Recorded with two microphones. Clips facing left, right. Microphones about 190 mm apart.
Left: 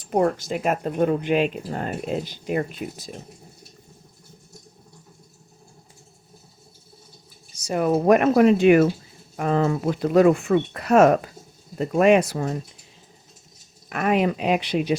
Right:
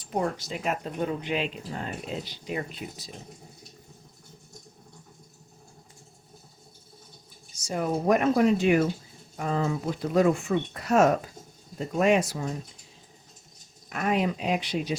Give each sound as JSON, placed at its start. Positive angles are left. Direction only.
{"t": 0.0, "sound": "speech", "side_deg": 55}
{"t": 7.5, "sound": "speech", "side_deg": 65}
{"t": 13.9, "sound": "speech", "side_deg": 70}